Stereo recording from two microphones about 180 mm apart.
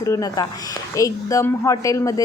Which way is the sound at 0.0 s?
20° left (ahead or behind).